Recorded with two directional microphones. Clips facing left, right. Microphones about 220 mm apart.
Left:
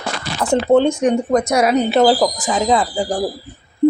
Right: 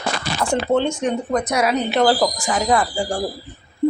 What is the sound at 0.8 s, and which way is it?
Speech, 50° left (ahead or behind).